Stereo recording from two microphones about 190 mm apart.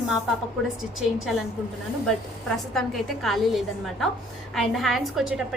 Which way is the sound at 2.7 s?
Centre (ahead or behind).